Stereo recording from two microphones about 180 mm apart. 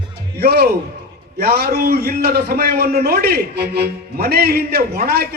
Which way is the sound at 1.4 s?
60° right (ahead or behind).